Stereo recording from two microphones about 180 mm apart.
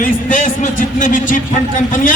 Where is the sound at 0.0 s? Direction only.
45° left (ahead or behind).